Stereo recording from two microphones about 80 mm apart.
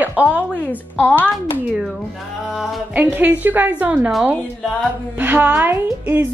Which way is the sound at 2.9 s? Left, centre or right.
Right.